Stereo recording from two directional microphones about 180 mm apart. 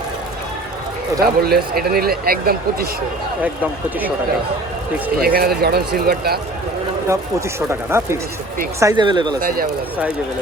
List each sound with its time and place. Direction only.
1.2 s a man's voice: 60° right (ahead or behind)
3.4 s speech: 10° right (ahead or behind)
5.2 s a man's voice: 60° right (ahead or behind)
7.7 s speech: 15° right (ahead or behind)
9.4 s speech: 50° right (ahead or behind)